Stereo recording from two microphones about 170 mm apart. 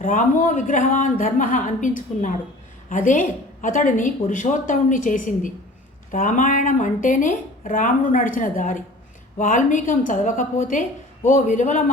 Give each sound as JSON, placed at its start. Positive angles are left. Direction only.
{"t": 0.0, "sound": "speech", "side_deg": 50}